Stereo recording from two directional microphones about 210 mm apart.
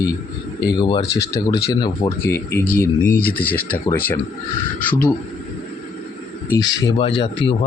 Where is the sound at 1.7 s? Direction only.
15° left (ahead or behind).